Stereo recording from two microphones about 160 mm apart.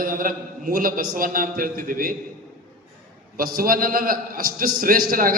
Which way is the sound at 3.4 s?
65° right (ahead or behind).